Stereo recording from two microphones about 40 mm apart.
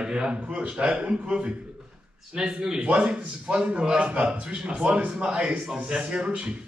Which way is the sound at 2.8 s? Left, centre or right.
Right.